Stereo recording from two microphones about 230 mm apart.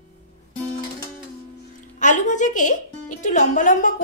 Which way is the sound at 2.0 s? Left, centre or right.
Left.